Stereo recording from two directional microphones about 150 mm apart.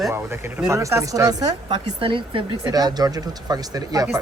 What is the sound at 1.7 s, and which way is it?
Speech, 35° right (ahead or behind).